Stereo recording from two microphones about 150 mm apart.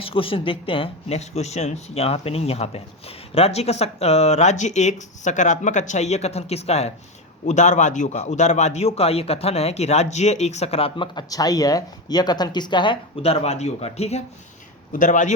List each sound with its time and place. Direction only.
0.0 s speech: 35° left (ahead or behind)
14.9 s speech: 60° left (ahead or behind)